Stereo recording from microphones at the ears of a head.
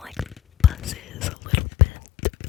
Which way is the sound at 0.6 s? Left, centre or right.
Left.